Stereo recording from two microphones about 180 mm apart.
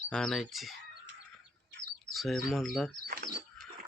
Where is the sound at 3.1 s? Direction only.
55° right (ahead or behind).